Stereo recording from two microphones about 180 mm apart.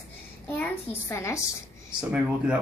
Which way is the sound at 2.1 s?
5° right (ahead or behind).